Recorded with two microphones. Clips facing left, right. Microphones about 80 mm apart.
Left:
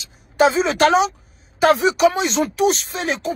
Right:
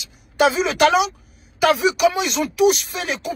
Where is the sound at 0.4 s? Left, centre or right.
Left.